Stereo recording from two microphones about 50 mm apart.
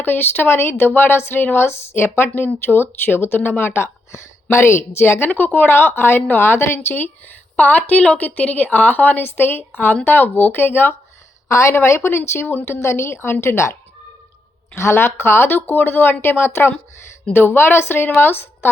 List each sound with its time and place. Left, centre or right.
0.0 s a woman's voice: left
2.0 s speech: left
4.1 s a woman's voice: left
5.3 s speech: left
7.5 s a woman's voice: left
11.4 s speech: left
11.7 s a woman's voice: left
14.8 s speech: left